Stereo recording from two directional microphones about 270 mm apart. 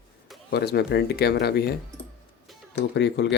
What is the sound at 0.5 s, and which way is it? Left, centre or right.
Speech, left.